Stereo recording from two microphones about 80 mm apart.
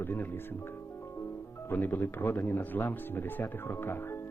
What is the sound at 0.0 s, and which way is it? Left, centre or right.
Music, left.